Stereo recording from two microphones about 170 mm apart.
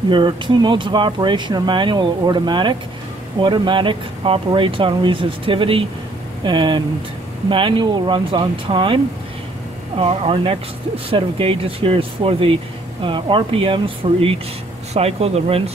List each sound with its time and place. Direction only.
0.1 s speech: 25° right (ahead or behind)